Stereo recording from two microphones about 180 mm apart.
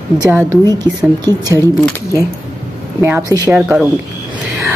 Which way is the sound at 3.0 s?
10° right (ahead or behind).